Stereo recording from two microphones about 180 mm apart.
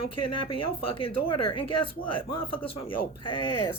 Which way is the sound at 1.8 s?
30° left (ahead or behind).